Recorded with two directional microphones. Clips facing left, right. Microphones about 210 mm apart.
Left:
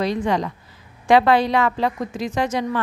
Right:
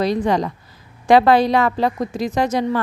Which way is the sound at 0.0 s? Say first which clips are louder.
Right 3 dB; 40° right (ahead or behind).